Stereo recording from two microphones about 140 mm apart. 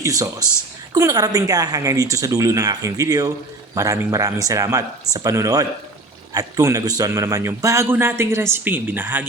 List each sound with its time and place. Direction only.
0.0 s a man's voice: 25° right (ahead or behind)